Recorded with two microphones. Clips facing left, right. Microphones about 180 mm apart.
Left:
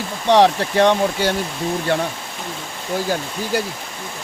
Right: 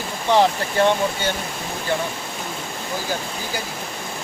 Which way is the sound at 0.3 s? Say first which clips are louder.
Left 4 dB; 80° left.